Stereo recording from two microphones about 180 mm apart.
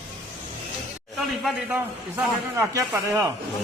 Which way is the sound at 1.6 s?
10° right (ahead or behind).